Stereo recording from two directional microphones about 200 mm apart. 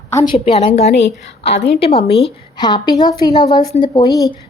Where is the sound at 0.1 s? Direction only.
15° left (ahead or behind).